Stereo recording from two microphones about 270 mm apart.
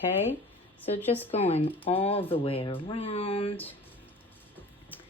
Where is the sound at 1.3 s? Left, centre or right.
Left.